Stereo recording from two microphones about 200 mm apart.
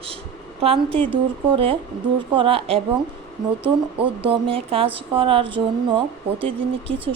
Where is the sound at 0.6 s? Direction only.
30° right (ahead or behind).